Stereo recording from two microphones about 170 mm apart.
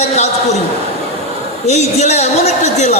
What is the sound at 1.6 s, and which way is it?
A man's voice, 40° left (ahead or behind).